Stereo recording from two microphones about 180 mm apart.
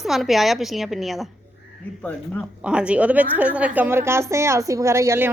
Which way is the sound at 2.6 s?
5° right (ahead or behind).